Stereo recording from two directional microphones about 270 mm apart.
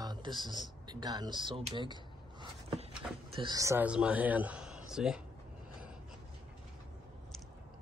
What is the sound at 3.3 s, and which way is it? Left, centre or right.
A man's voice, centre.